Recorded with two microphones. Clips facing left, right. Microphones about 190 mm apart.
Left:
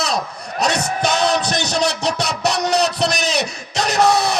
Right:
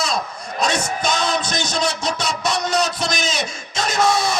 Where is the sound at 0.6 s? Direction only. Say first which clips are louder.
Left 2 dB; 65° left (ahead or behind).